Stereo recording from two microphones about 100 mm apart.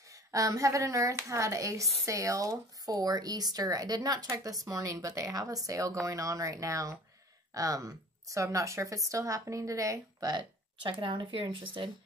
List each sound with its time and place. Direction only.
0.0 s a woman's voice: 35° right (ahead or behind)
10.3 s speech: 55° right (ahead or behind)